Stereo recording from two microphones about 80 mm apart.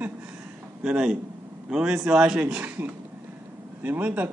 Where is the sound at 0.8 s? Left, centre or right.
Centre.